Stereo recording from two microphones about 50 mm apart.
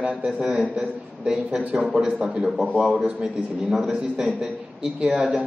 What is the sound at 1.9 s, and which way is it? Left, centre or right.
A man's voice, centre.